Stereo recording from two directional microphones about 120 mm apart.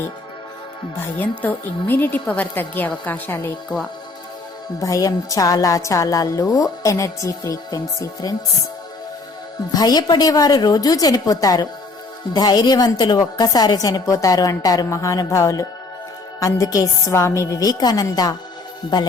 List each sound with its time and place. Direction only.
1.0 s a woman's voice: 15° left (ahead or behind)
4.8 s speech: 30° left (ahead or behind)
9.7 s a woman's voice: 35° left (ahead or behind)